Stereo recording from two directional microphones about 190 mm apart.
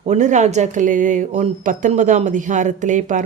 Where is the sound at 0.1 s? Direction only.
40° right (ahead or behind).